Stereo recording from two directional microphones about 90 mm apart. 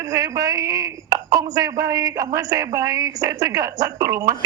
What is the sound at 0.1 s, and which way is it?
Speech, 40° right (ahead or behind).